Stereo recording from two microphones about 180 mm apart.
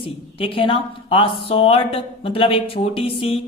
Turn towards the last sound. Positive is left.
turn(degrees=30)  # may be behind; listen again after turning